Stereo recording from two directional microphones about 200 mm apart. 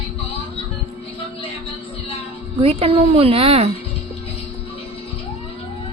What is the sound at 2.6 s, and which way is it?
A woman's voice, 30° right (ahead or behind).